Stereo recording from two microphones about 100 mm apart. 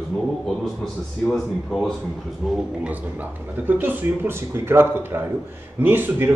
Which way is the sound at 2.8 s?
15° right (ahead or behind).